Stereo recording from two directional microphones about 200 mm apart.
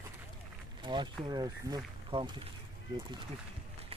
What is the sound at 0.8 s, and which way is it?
Speech, 25° right (ahead or behind).